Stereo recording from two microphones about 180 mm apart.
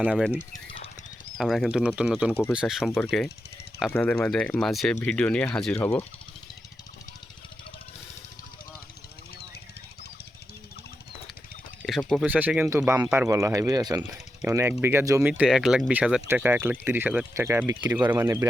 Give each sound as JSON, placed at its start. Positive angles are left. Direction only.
{"t": 0.0, "sound": "speech", "side_deg": -5}
{"t": 0.5, "sound": "a sound", "side_deg": 30}
{"t": 1.4, "sound": "speech", "side_deg": 0}
{"t": 3.8, "sound": "speech", "side_deg": 10}
{"t": 11.9, "sound": "speech", "side_deg": 0}